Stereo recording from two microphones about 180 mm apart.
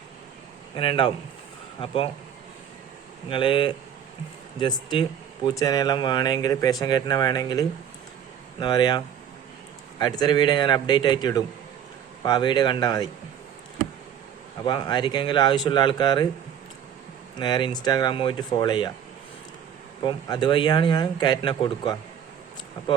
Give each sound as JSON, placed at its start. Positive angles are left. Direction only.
{"t": 0.8, "sound": "speech", "side_deg": 30}
{"t": 3.2, "sound": "speech", "side_deg": 25}
{"t": 10.0, "sound": "speech", "side_deg": 25}
{"t": 14.6, "sound": "speech", "side_deg": 25}
{"t": 17.3, "sound": "speech", "side_deg": 25}
{"t": 20.1, "sound": "speech", "side_deg": 25}